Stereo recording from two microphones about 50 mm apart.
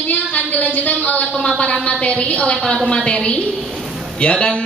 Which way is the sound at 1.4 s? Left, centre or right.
Left.